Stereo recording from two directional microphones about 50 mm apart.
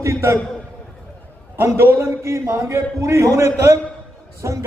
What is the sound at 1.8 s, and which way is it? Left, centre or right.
Speech, right.